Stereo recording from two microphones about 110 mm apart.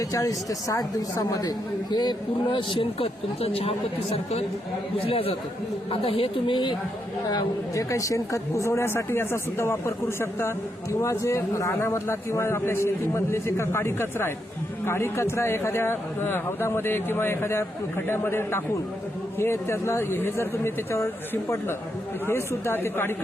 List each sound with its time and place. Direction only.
0.1 s a woman's voice: 30° left (ahead or behind); by 6.6 s 60° left (ahead or behind)
7.3 s a man's voice: 35° left (ahead or behind)
22.3 s a man's voice: 20° left (ahead or behind)